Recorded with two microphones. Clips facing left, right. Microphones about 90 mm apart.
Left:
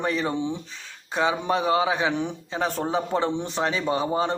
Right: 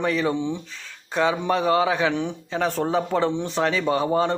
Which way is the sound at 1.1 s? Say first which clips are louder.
Right 2 dB; 20° left (ahead or behind).